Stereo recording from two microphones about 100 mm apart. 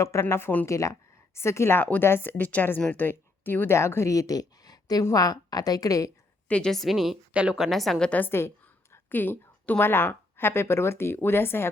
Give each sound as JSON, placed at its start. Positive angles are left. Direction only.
{"t": 0.0, "sound": "a woman's voice", "side_deg": 30}
{"t": 6.5, "sound": "a woman's voice", "side_deg": 5}